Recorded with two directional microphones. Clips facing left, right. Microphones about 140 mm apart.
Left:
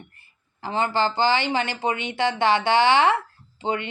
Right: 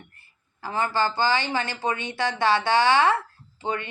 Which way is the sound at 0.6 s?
20° left (ahead or behind).